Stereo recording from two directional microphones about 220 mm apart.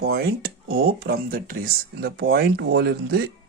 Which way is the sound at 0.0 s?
45° right (ahead or behind).